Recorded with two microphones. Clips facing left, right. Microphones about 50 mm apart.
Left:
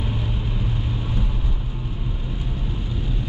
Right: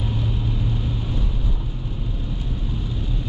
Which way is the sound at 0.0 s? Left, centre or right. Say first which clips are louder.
Right 1 dB; centre.